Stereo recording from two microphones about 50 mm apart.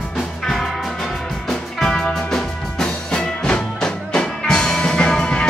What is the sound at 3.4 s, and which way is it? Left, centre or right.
Music, centre.